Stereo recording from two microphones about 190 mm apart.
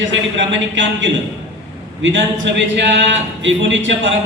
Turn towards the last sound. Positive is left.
turn(degrees=-75)  # may be behind; listen again after turning